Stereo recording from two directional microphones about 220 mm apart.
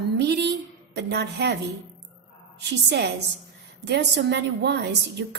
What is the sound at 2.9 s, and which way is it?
A woman's voice, 50° right (ahead or behind).